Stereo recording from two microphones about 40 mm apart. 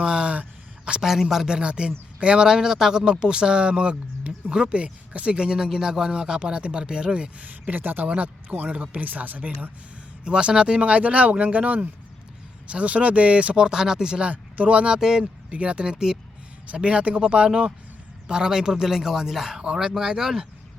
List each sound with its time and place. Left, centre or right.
0.0 s a sound: centre
1.0 s speech: centre
1.5 s speech: right
7.4 s speech: right
8.0 s speech: right
10.2 s speech: right
13.6 s speech: centre
14.3 s speech: right; by 20.5 s centre